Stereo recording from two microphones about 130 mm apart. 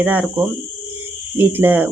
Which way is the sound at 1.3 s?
15° right (ahead or behind).